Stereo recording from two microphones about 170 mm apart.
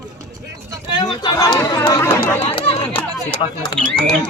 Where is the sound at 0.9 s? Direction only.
25° left (ahead or behind).